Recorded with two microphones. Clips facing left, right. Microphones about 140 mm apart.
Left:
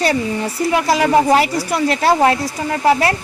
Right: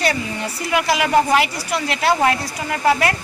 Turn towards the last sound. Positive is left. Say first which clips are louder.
# left 3 dB
turn(degrees=30)  # may be behind; listen again after turning